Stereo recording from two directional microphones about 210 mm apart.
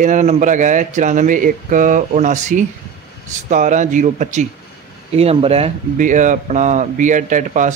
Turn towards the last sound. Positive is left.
turn(degrees=-35)  # may be behind; listen again after turning